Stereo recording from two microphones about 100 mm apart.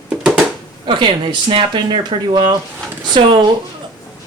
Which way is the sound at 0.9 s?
50° right (ahead or behind).